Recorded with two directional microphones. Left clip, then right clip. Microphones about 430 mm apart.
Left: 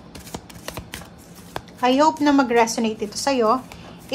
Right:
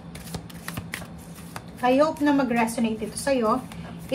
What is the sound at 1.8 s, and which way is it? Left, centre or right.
A woman's voice, centre.